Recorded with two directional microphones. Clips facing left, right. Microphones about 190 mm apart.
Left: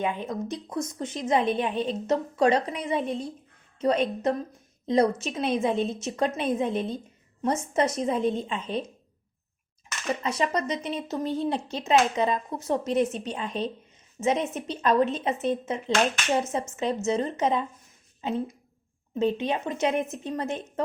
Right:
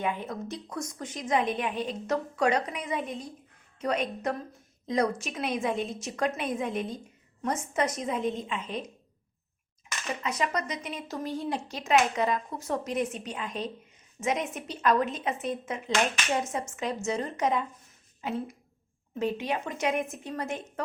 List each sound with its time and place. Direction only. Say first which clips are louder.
0.0 s a woman's voice: left 3 dB; 20° left (ahead or behind)
10.2 s speech: left 3 dB; 30° left (ahead or behind)